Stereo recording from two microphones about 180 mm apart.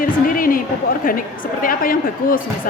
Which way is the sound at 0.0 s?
50° left (ahead or behind).